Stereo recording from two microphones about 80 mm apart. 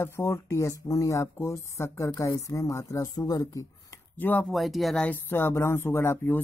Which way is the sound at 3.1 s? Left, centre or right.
Left.